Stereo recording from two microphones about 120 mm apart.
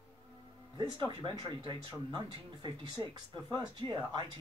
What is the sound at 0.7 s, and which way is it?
Speech, 40° right (ahead or behind).